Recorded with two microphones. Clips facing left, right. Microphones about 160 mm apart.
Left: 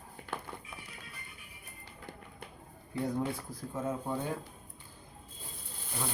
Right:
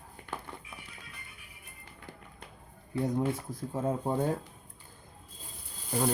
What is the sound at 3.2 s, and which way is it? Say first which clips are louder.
Speech: right 4 dB; 25° right (ahead or behind).